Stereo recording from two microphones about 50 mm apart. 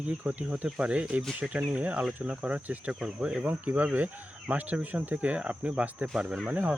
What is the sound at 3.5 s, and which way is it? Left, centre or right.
Speech, right.